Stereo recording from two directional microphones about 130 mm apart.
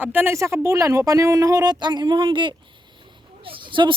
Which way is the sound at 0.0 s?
15° right (ahead or behind).